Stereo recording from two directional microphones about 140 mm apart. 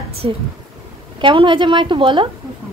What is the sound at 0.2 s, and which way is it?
A woman's voice, 40° right (ahead or behind).